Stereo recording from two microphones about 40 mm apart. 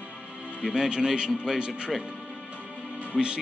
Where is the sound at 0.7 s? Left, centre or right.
Right.